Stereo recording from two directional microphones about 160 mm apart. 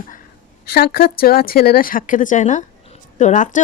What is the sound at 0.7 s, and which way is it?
Speech, 70° left (ahead or behind).